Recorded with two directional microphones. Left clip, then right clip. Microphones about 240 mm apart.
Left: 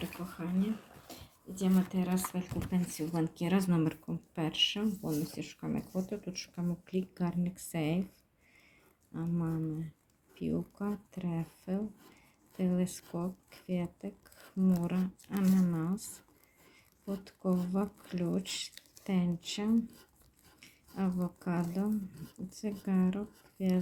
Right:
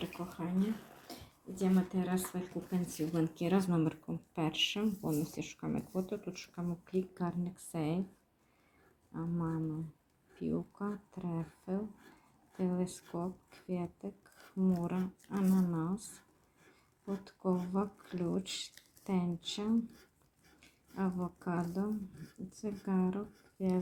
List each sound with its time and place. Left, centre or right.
0.0 s speech: centre
9.1 s speech: left
17.1 s speech: centre